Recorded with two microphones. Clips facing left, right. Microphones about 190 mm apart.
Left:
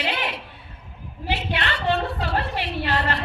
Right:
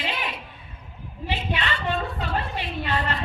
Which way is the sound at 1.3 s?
75° left (ahead or behind).